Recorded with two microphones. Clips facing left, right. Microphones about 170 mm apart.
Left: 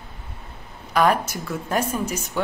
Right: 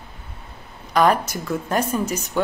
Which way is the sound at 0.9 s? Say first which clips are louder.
Right 2 dB; 5° left (ahead or behind).